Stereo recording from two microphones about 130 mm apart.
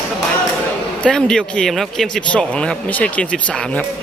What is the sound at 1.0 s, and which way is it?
Speech, 5° left (ahead or behind).